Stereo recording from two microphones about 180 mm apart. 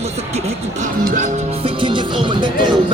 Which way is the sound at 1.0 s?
50° right (ahead or behind).